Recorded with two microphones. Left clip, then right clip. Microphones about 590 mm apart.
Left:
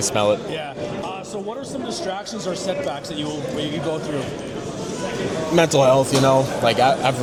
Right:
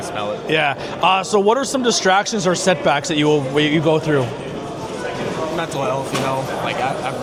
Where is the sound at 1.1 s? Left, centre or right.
Right.